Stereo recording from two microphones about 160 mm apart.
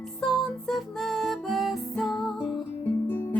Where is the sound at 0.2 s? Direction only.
Centre (ahead or behind).